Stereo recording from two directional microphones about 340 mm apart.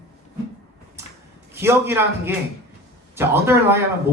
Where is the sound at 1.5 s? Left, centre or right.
Centre.